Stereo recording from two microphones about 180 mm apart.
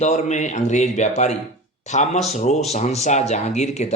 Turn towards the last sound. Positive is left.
turn(degrees=40)  # may be behind; listen again after turning